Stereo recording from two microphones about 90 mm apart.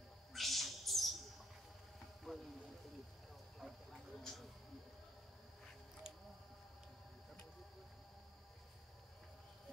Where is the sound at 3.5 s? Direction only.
Centre (ahead or behind).